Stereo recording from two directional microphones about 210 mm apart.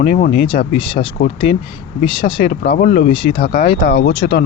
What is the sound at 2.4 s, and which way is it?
Speech, 45° left (ahead or behind).